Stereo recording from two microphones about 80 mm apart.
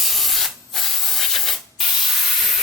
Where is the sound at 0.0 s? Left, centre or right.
Centre.